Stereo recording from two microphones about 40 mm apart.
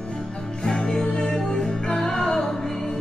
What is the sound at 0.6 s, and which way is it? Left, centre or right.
Music, centre.